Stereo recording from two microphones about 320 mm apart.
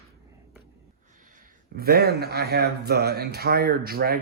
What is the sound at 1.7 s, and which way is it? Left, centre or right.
Speech, right.